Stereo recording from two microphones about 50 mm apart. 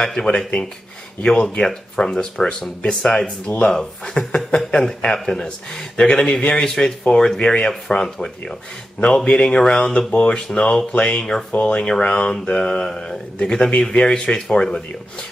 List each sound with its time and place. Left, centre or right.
0.0 s speech: centre